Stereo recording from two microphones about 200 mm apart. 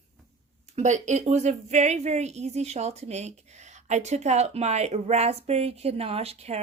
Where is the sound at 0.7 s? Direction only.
35° right (ahead or behind).